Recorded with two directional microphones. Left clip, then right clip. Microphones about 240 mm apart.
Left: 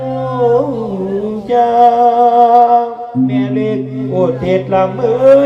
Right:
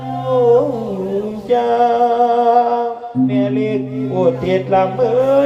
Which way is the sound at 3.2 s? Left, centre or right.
Left.